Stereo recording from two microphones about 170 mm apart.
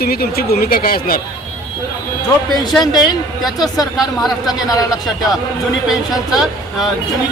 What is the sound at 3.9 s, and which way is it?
Speech, centre (ahead or behind).